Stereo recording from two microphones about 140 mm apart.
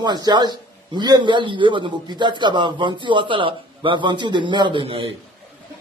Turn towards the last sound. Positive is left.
turn(degrees=-40)  # may be behind; listen again after turning